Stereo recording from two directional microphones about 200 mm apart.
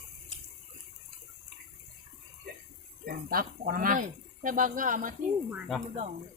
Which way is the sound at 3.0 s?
45° right (ahead or behind).